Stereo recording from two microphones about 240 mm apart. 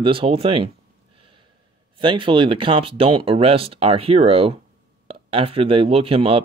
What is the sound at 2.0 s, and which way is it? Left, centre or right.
Speech, right.